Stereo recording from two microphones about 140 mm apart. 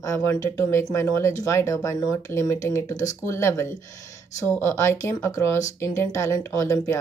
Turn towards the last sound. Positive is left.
turn(degrees=20)  # may be behind; listen again after turning